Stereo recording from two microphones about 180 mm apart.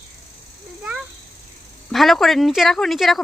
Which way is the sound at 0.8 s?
5° right (ahead or behind).